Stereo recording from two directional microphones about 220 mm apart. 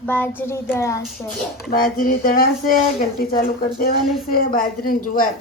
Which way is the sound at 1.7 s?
40° left (ahead or behind).